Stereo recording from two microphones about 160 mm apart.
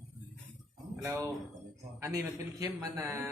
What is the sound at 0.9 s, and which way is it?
A man's voice, 20° right (ahead or behind).